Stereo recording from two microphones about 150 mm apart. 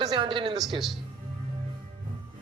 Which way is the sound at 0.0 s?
30° right (ahead or behind).